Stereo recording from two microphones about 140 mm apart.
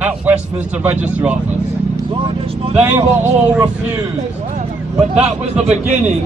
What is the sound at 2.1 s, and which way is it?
Vehicle, 40° right (ahead or behind).